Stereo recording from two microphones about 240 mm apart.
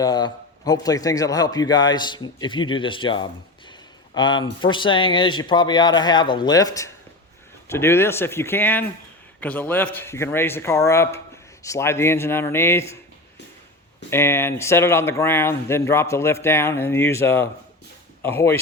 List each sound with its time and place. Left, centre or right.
0.0 s speech: centre
3.7 s a sound: centre
4.6 s speech: centre
14.1 s speech: centre